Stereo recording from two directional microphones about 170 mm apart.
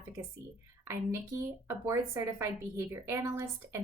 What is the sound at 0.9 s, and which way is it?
Speech, 15° right (ahead or behind).